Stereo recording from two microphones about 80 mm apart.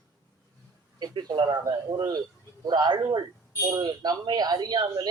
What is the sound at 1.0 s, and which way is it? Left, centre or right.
Speech, right.